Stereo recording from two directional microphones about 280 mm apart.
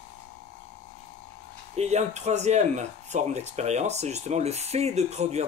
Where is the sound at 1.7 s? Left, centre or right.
Right.